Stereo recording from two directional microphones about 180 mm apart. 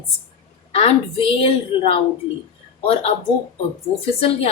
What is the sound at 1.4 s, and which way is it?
Speech, 30° left (ahead or behind).